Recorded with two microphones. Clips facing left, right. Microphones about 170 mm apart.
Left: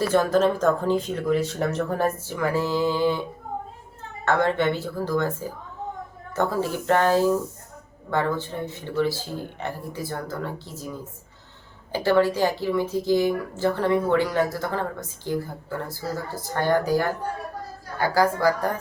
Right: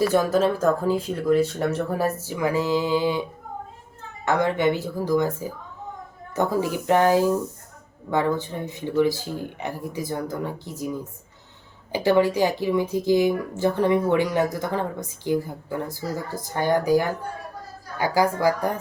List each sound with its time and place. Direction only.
0.0 s speech: 10° right (ahead or behind)
4.3 s speech: 15° right (ahead or behind)